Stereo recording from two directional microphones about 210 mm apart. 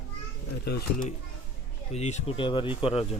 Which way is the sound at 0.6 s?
50° left (ahead or behind).